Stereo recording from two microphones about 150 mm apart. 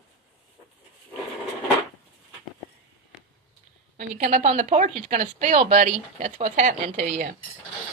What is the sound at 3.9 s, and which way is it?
A woman's voice, 55° right (ahead or behind).